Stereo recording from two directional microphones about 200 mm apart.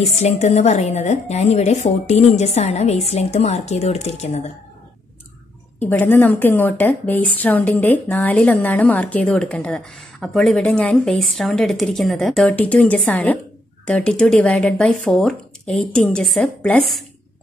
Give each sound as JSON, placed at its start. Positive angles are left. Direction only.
{"t": 0.0, "sound": "a woman's voice", "side_deg": 35}
{"t": 5.8, "sound": "a woman's voice", "side_deg": 10}